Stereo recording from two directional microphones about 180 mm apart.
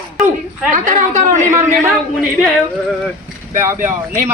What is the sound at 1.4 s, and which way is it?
Speech, 15° right (ahead or behind).